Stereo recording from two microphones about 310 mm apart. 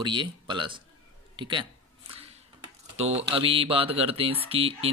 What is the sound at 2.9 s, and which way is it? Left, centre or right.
Speech, centre.